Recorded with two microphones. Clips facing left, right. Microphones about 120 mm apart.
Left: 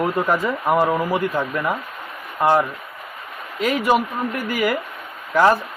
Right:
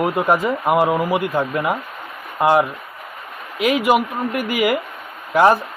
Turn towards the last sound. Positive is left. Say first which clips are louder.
# right 2 dB
turn(degrees=-20)  # may be behind; listen again after turning